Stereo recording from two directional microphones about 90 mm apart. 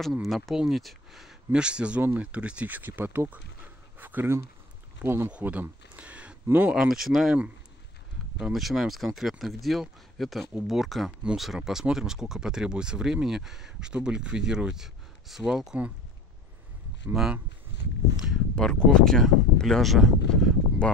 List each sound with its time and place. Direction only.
0.2 s speech: centre (ahead or behind); by 6.7 s 20° right (ahead or behind)
6.7 s speech: 5° right (ahead or behind)
8.4 s speech: 5° right (ahead or behind)
17.1 s speech: 5° right (ahead or behind)
18.6 s speech: 10° left (ahead or behind)